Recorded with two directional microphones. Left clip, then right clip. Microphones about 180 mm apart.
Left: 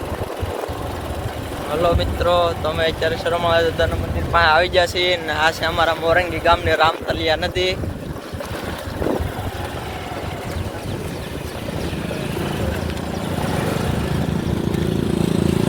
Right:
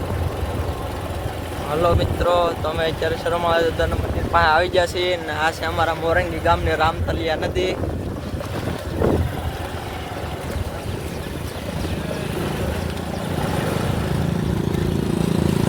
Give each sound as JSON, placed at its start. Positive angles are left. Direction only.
{"t": 1.8, "sound": "speech", "side_deg": -15}